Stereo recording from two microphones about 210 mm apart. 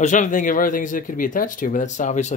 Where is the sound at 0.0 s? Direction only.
35° left (ahead or behind).